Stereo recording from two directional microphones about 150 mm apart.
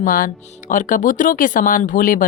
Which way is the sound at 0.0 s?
65° left (ahead or behind).